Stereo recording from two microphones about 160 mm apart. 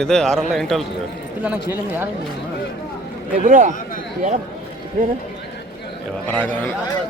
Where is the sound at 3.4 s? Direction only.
50° right (ahead or behind).